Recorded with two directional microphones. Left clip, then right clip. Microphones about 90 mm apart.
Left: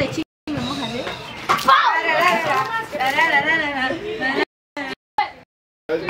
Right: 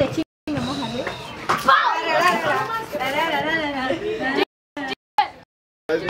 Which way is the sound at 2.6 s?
20° left (ahead or behind).